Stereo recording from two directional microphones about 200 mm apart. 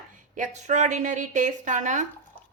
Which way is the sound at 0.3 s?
40° right (ahead or behind).